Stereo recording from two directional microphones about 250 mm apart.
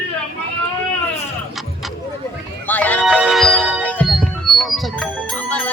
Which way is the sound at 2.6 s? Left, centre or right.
Centre.